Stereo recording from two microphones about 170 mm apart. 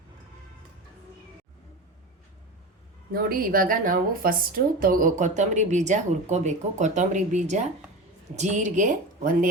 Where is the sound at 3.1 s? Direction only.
60° right (ahead or behind).